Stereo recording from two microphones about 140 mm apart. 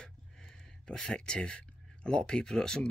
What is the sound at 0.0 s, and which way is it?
Speech, 5° left (ahead or behind).